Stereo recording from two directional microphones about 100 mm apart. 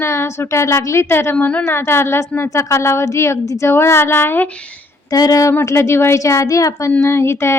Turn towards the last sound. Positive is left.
turn(degrees=25)  # may be behind; listen again after turning